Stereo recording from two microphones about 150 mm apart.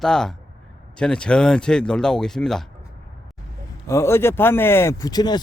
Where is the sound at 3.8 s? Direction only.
20° left (ahead or behind).